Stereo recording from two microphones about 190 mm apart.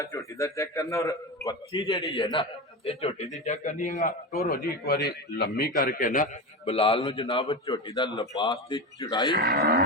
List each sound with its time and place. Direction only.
0.0 s a man's voice: 15° left (ahead or behind); by 6.3 s 45° left (ahead or behind)
6.7 s a man's voice: 30° left (ahead or behind)
9.4 s speech: 55° right (ahead or behind)